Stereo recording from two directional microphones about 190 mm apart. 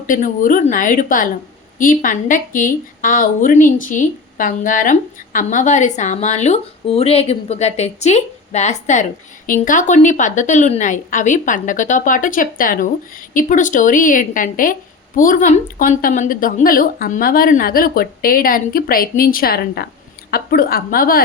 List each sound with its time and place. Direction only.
0.1 s a woman's voice: 45° left (ahead or behind)